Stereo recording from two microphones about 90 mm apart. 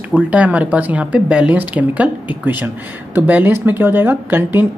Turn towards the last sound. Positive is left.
turn(degrees=-20)  # may be behind; listen again after turning